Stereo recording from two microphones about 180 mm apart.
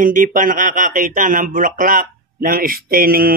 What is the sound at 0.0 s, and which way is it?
Speech, 50° right (ahead or behind).